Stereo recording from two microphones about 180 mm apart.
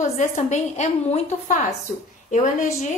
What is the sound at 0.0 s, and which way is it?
A woman's voice, 40° left (ahead or behind).